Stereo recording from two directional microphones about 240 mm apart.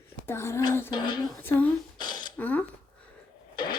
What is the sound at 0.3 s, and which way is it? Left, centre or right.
Speech, centre.